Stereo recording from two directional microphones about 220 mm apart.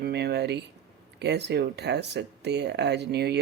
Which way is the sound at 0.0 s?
50° right (ahead or behind).